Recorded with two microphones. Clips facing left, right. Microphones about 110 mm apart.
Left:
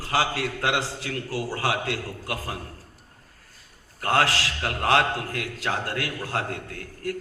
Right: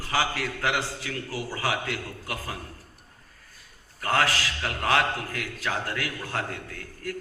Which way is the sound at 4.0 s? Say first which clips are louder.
Left 2 dB; 35° left (ahead or behind).